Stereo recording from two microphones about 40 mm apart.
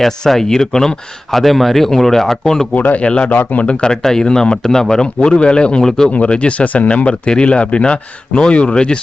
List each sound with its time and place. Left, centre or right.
0.0 s a man's voice: centre
1.3 s a man's voice: centre
2.7 s speech: left
4.0 s a man's voice: centre
5.4 s speech: left
6.1 s speech: left